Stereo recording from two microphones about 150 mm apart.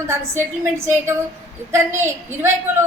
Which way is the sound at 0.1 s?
15° right (ahead or behind).